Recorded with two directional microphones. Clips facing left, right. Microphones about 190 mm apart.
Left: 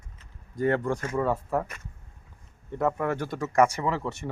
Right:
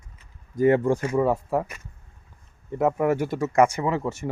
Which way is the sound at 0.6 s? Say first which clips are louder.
Right 6 dB; 20° right (ahead or behind).